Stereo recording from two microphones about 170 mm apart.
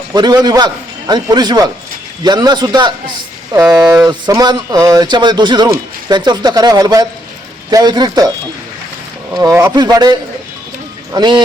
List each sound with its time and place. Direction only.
0.1 s speech: 25° right (ahead or behind)
9.4 s speech: 15° right (ahead or behind)